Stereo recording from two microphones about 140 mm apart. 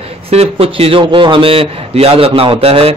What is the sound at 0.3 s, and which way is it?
A man's voice, 45° right (ahead or behind).